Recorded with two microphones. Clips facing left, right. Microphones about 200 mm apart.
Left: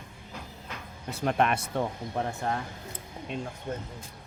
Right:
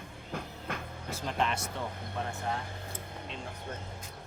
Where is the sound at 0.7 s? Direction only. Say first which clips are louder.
Right 5 dB; 55° right (ahead or behind).